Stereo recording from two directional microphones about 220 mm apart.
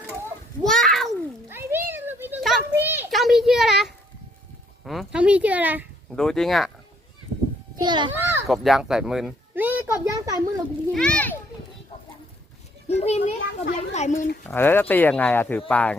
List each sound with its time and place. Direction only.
0.6 s a sound: centre (ahead or behind)
1.5 s a sound: 10° right (ahead or behind)
1.9 s children playing: 10° right (ahead or behind)
4.9 s speech: 5° right (ahead or behind)
7.8 s a child's voice: 20° right (ahead or behind)
8.1 s children playing: 10° right (ahead or behind)
8.4 s speech: centre (ahead or behind)
10.9 s speech: 5° left (ahead or behind)
12.9 s a child's voice: 30° left (ahead or behind)
14.4 s speech: 10° left (ahead or behind)